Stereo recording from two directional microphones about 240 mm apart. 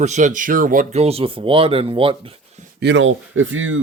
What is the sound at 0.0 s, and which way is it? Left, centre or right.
Speech, right.